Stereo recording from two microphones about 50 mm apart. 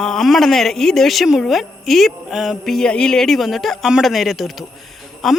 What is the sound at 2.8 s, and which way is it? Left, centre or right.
Speech, centre.